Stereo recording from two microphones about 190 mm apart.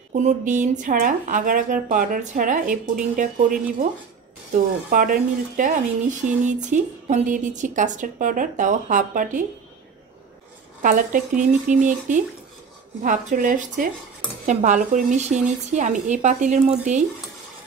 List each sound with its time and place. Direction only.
0.1 s speech: 40° right (ahead or behind)
4.8 s speech: 50° right (ahead or behind)
10.8 s speech: 45° right (ahead or behind)